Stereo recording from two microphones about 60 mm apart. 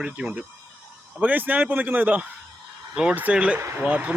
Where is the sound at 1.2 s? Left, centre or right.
Right.